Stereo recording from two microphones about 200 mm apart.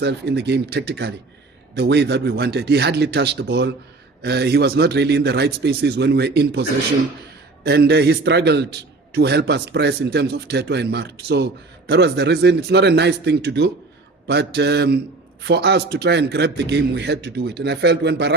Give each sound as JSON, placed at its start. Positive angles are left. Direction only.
{"t": 0.0, "sound": "a man's voice", "side_deg": -55}